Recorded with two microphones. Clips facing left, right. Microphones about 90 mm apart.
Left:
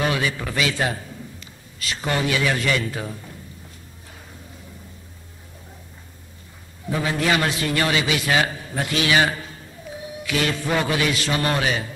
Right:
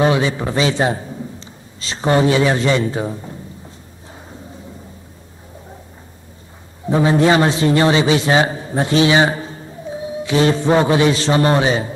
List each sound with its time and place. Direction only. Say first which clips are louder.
0.0 s a man's voice: right 7 dB; 25° right (ahead or behind)
6.9 s a man's voice: right 9 dB; 30° right (ahead or behind)